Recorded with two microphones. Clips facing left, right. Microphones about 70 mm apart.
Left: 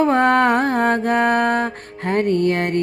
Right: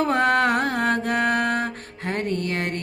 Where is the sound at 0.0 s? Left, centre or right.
Left.